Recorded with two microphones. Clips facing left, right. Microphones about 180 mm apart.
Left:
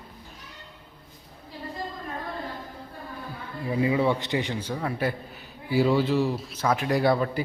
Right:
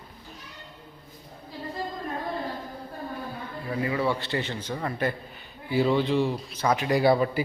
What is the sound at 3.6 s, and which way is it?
Speech, 15° left (ahead or behind).